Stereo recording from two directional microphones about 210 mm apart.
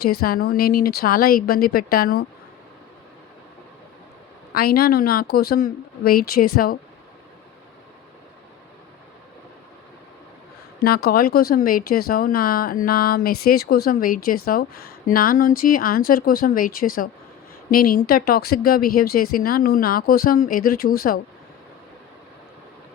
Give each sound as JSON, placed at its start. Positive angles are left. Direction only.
{"t": 0.0, "sound": "speech", "side_deg": 45}
{"t": 4.5, "sound": "speech", "side_deg": 45}
{"t": 10.8, "sound": "speech", "side_deg": 50}